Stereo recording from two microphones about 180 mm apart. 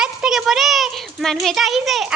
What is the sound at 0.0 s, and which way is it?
A child's voice, 5° right (ahead or behind).